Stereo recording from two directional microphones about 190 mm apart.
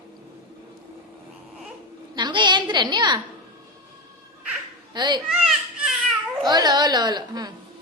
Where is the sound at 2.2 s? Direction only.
25° right (ahead or behind).